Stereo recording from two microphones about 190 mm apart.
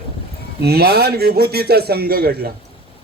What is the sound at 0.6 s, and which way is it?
A man's voice, 55° right (ahead or behind).